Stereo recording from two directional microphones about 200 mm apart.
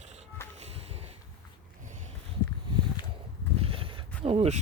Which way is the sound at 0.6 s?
30° right (ahead or behind).